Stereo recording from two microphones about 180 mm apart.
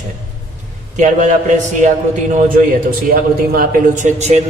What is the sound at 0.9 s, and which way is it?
A man's voice, 45° right (ahead or behind).